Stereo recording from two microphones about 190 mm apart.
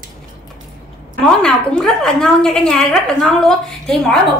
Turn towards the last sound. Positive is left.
turn(degrees=0)  # may be behind; listen again after turning